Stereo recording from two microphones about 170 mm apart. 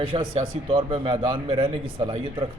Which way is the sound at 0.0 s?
30° right (ahead or behind).